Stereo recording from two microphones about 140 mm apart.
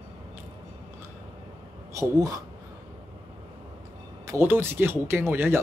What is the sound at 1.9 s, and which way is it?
Speech, 25° right (ahead or behind).